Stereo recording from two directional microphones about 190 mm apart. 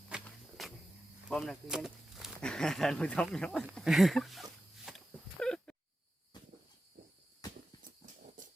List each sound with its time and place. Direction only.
0.1 s walk: centre (ahead or behind)
1.3 s speech: 5° left (ahead or behind)
4.9 s a sound: centre (ahead or behind)